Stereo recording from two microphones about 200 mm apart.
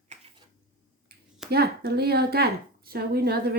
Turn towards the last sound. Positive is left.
turn(degrees=-50)  # may be behind; listen again after turning